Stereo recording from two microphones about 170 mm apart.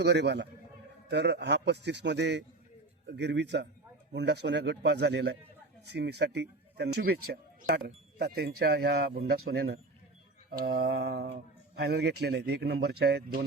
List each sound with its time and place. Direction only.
0.0 s a man's voice: 90° right; by 13.4 s 70° right (ahead or behind)